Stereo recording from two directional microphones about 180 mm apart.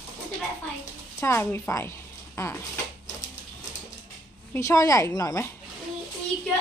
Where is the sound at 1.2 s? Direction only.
15° left (ahead or behind).